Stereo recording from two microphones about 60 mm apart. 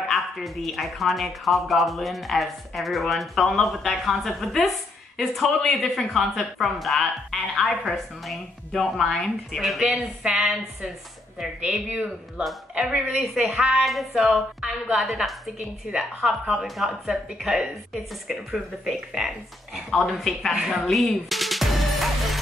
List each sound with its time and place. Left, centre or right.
0.1 s a woman's voice: centre
9.6 s speech: centre
9.8 s speech: centre
12.8 s speech: centre
13.5 s speech: centre
13.8 s speech: centre
20.5 s speech: centre
20.8 s music: centre